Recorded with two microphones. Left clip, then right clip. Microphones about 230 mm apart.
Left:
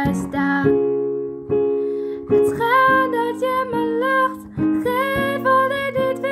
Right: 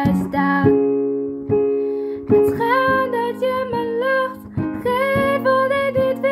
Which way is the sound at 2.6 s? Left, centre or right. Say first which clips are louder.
Left 2 dB; centre.